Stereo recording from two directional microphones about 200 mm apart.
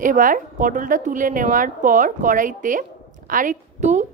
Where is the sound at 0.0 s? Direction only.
40° right (ahead or behind).